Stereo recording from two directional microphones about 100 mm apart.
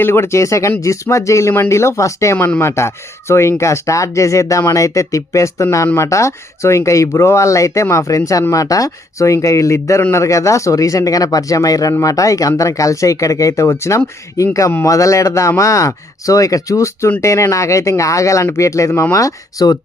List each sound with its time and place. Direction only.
0.0 s speech: 25° left (ahead or behind)